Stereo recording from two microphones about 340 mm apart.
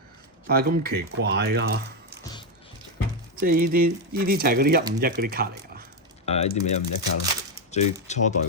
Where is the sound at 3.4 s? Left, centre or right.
Right.